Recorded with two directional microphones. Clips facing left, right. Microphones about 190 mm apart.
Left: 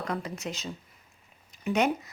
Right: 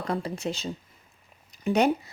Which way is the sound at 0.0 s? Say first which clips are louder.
Right 4 dB; 30° right (ahead or behind).